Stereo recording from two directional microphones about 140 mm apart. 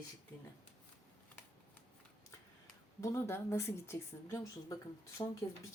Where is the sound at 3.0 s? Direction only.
20° left (ahead or behind).